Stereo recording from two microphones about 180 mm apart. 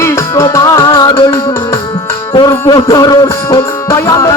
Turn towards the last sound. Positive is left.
turn(degrees=20)  # may be behind; listen again after turning